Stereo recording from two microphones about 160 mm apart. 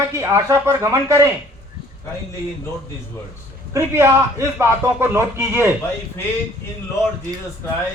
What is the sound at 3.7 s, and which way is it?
Speech, 15° right (ahead or behind).